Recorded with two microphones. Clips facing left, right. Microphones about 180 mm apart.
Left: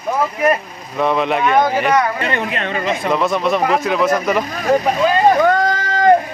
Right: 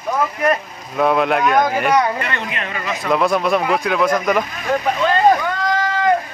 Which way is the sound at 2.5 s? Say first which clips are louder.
Left 5 dB; 30° left (ahead or behind).